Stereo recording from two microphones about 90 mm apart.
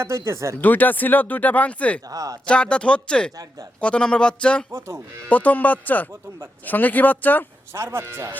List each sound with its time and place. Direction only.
0.0 s speech: 30° right (ahead or behind)
0.6 s speech: 20° left (ahead or behind)
2.0 s speech: 40° right (ahead or behind)
2.5 s speech: 10° left (ahead or behind)
7.7 s speech: 30° right (ahead or behind)